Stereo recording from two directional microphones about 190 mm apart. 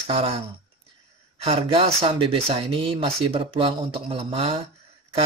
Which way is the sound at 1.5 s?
30° right (ahead or behind).